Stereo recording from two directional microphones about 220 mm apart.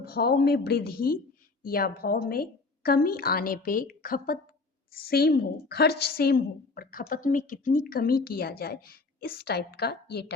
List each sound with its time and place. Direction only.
0.0 s a woman's voice: 45° left (ahead or behind)